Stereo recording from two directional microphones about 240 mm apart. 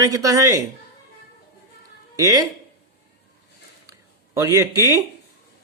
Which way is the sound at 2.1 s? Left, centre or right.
Centre.